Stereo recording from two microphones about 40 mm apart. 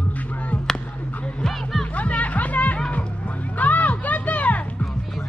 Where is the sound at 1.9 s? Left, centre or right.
Left.